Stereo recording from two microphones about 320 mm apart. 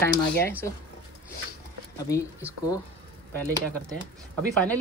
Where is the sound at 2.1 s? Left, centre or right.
Centre.